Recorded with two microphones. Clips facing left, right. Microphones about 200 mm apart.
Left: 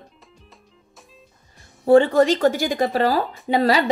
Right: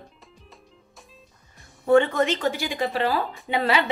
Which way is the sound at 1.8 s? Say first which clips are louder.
Left 5 dB; 30° left (ahead or behind).